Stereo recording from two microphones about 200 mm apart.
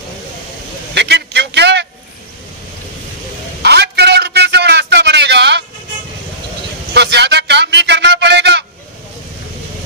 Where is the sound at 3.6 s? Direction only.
55° right (ahead or behind).